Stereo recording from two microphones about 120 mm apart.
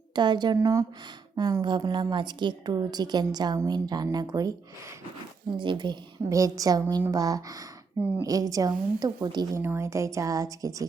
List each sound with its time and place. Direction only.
0.2 s a woman's voice: 40° right (ahead or behind)
5.5 s a woman's voice: 40° right (ahead or behind)
6.2 s a woman's voice: 25° right (ahead or behind)
9.6 s speech: 20° right (ahead or behind)